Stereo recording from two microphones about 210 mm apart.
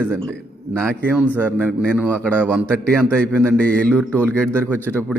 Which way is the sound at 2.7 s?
5° left (ahead or behind).